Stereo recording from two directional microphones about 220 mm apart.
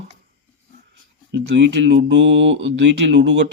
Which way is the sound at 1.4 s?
50° right (ahead or behind).